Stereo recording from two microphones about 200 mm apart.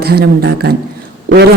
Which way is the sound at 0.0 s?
50° right (ahead or behind).